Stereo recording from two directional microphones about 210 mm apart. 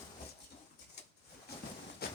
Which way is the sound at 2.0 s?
45° left (ahead or behind).